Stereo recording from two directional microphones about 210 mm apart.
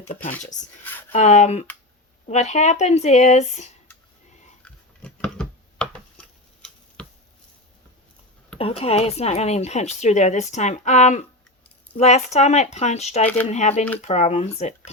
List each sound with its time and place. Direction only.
0.3 s speech: 10° left (ahead or behind)
1.1 s speech: 35° left (ahead or behind)
4.6 s a sound: 5° left (ahead or behind)
7.0 s chopping: 5° left (ahead or behind)
8.5 s speech: 30° left (ahead or behind)